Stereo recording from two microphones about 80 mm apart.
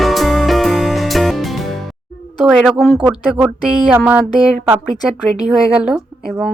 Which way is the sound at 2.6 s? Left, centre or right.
Centre.